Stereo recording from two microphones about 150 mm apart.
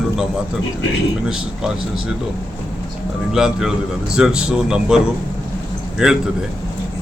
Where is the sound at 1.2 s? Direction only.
5° right (ahead or behind).